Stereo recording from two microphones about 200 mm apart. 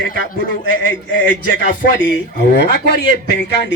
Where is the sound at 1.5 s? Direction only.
70° left (ahead or behind).